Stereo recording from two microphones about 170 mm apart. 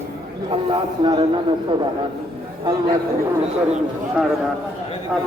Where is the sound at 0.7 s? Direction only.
30° right (ahead or behind).